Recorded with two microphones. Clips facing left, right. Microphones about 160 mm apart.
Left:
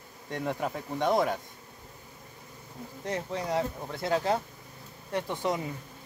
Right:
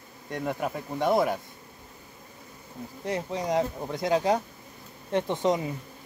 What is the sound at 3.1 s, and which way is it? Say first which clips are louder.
Speech: right 3 dB; 15° right (ahead or behind).